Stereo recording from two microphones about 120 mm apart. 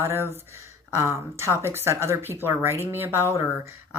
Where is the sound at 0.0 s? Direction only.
20° right (ahead or behind).